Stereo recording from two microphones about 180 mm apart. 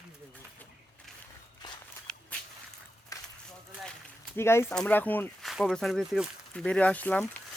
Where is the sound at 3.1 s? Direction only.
20° left (ahead or behind).